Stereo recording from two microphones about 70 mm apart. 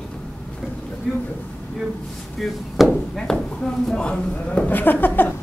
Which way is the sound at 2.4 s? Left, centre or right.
Centre.